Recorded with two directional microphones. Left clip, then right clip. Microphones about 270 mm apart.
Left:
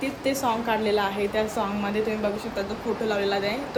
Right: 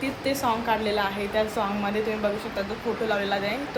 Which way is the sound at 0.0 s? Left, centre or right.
Centre.